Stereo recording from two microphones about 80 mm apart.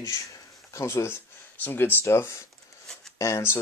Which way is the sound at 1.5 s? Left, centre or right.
Left.